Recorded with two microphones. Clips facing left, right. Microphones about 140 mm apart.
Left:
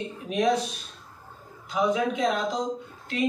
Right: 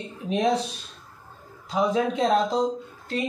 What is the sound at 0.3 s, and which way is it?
Speech, 30° right (ahead or behind).